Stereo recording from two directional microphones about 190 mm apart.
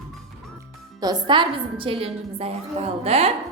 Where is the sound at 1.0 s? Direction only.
20° right (ahead or behind).